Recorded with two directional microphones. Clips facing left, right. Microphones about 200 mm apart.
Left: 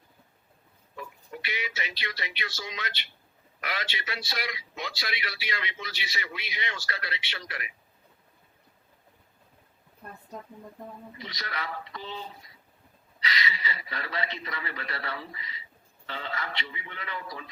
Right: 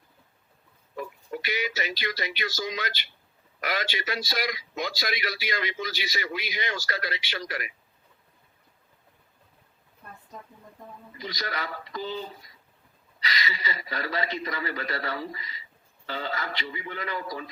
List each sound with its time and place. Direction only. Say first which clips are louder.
0.9 s a man's voice: right 6 dB; 40° right (ahead or behind)
11.2 s a man's voice: right 5 dB; 40° right (ahead or behind)